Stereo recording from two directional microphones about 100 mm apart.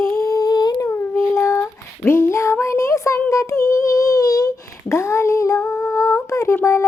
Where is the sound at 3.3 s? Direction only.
30° left (ahead or behind).